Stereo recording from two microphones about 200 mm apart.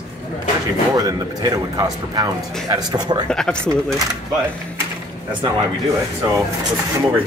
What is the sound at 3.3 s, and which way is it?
Speech, 5° left (ahead or behind).